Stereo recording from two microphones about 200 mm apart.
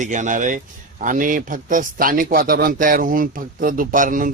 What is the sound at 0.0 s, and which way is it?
Speech, 35° right (ahead or behind).